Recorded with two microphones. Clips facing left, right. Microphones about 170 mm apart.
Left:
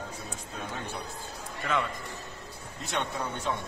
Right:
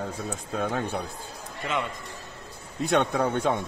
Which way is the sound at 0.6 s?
75° right (ahead or behind).